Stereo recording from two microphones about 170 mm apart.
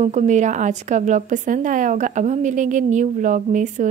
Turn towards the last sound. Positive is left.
turn(degrees=-45)  # may be behind; listen again after turning